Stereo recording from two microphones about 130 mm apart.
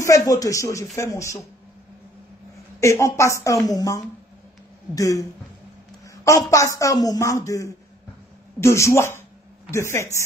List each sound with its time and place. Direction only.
0.0 s a woman's voice: 25° left (ahead or behind)
2.8 s a woman's voice: 20° left (ahead or behind)
6.2 s a woman's voice: 25° left (ahead or behind)